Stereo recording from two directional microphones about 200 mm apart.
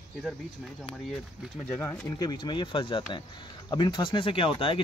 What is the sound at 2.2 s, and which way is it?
Speech, 20° left (ahead or behind).